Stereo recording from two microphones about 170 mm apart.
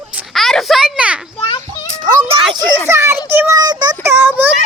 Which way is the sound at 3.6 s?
25° right (ahead or behind).